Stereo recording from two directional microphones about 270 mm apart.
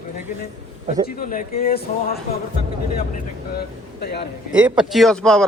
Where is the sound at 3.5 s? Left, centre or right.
Left.